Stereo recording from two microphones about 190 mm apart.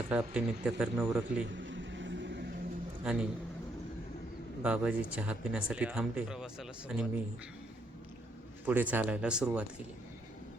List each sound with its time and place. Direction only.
0.1 s speech: 5° right (ahead or behind)
1.5 s vehicle: 75° right (ahead or behind)
3.0 s a man's voice: 5° right (ahead or behind)
4.6 s speech: 5° right (ahead or behind)
8.6 s speech: 10° right (ahead or behind)